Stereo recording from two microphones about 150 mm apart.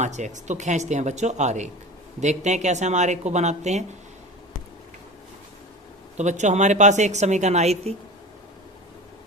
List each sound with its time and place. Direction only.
0.0 s a woman's voice: 50° right (ahead or behind)
6.1 s a woman's voice: 50° right (ahead or behind)